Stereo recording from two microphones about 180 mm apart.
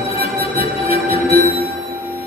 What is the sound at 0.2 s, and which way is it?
Music, 35° left (ahead or behind).